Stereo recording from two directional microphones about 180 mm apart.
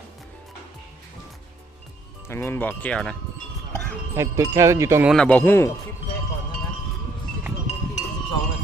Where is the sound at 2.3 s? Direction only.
10° left (ahead or behind).